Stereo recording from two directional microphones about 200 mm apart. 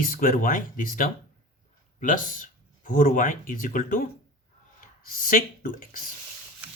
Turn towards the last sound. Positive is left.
turn(degrees=45)  # may be behind; listen again after turning